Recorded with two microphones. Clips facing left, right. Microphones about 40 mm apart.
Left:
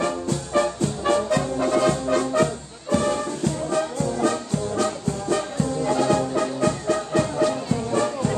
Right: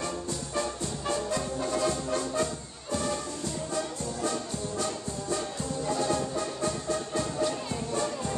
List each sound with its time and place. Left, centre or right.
0.0 s music: left